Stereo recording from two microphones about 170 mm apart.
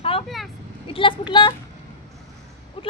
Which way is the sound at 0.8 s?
30° left (ahead or behind).